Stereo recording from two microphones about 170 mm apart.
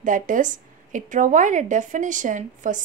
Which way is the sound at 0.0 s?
50° right (ahead or behind).